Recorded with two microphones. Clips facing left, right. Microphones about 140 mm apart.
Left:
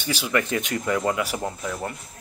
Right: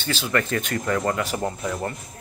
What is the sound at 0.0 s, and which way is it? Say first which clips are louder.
Speech: even; 10° left (ahead or behind).